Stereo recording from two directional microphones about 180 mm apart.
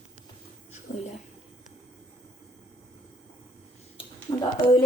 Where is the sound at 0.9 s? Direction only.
40° left (ahead or behind).